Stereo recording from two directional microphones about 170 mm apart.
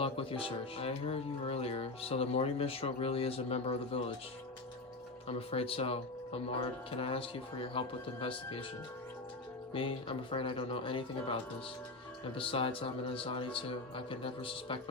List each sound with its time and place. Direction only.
0.0 s speech: 35° left (ahead or behind)
5.5 s speech: 35° left (ahead or behind)
9.7 s speech: 30° left (ahead or behind)